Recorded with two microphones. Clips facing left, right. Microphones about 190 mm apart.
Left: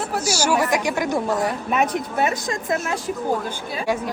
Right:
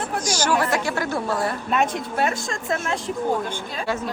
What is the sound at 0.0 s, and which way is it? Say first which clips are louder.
A woman's voice: left 2 dB; 5° left (ahead or behind).